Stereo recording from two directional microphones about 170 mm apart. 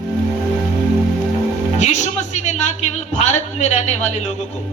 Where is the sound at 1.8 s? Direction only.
45° left (ahead or behind).